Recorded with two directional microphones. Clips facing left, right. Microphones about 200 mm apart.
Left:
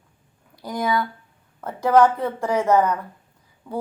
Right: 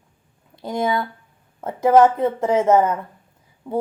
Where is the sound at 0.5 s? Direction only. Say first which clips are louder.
Right 2 dB; 25° right (ahead or behind).